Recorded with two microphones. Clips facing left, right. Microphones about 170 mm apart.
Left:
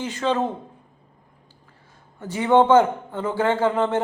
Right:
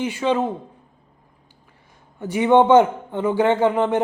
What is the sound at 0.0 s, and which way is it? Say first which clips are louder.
Speech: right 2 dB; 15° right (ahead or behind).